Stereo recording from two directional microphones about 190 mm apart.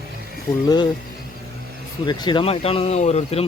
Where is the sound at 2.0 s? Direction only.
25° left (ahead or behind).